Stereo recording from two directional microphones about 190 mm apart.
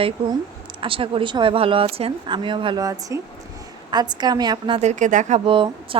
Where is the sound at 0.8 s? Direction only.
30° right (ahead or behind).